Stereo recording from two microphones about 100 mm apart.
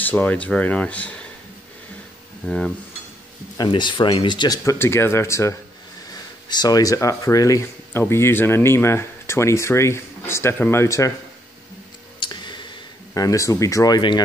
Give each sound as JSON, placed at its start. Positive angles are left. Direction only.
{"t": 0.0, "sound": "speech", "side_deg": 15}
{"t": 2.4, "sound": "speech", "side_deg": 10}
{"t": 3.5, "sound": "speech", "side_deg": 50}
{"t": 4.6, "sound": "speech", "side_deg": 25}
{"t": 6.0, "sound": "speech", "side_deg": 40}
{"t": 7.9, "sound": "speech", "side_deg": 25}
{"t": 12.2, "sound": "a sound", "side_deg": 50}
{"t": 13.1, "sound": "speech", "side_deg": 35}